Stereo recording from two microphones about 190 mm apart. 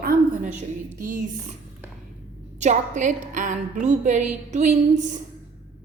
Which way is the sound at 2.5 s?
40° right (ahead or behind).